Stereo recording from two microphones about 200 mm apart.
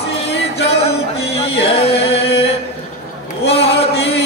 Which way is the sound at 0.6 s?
30° left (ahead or behind).